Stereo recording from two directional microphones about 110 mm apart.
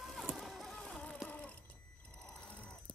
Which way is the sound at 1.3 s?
15° left (ahead or behind).